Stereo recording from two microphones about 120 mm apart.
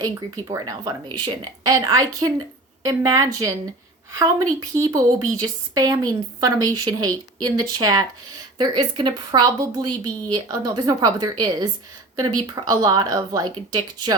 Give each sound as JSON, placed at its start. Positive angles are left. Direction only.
{"t": 0.5, "sound": "speech", "side_deg": -35}
{"t": 4.6, "sound": "speech", "side_deg": -30}